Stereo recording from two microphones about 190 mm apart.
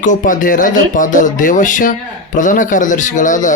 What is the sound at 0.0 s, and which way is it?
Speech, 45° left (ahead or behind).